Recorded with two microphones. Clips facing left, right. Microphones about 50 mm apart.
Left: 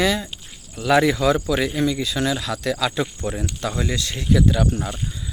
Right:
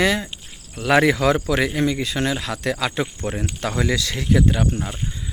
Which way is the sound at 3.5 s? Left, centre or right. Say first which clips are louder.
Right 3 dB; right.